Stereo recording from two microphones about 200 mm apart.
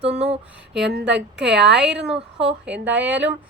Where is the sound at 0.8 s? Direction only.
60° right (ahead or behind).